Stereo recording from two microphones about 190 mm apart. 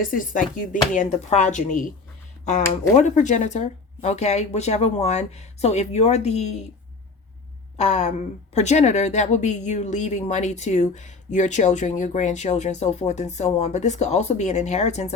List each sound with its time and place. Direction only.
0.0 s speech: 45° left (ahead or behind)
7.8 s speech: 35° left (ahead or behind)